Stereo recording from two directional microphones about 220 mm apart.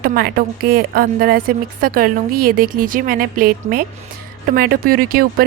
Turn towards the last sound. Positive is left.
turn(degrees=-40)  # may be behind; listen again after turning